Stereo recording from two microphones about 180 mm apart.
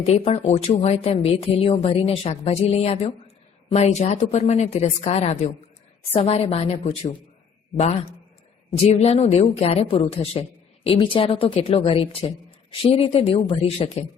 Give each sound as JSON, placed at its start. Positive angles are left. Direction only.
{"t": 0.0, "sound": "speech", "side_deg": 35}
{"t": 8.8, "sound": "speech", "side_deg": 35}